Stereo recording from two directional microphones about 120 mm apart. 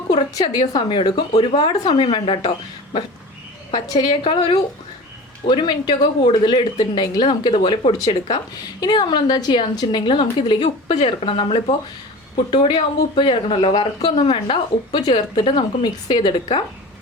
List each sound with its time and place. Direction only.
0.3 s a woman's voice: 40° left (ahead or behind)
7.9 s speech: 35° left (ahead or behind)